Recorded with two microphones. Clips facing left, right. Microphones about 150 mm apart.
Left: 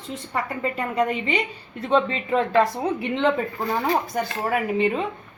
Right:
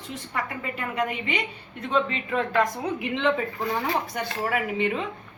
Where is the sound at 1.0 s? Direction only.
25° left (ahead or behind).